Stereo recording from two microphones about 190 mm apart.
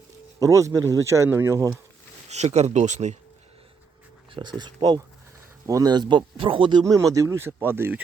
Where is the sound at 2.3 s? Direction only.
35° right (ahead or behind).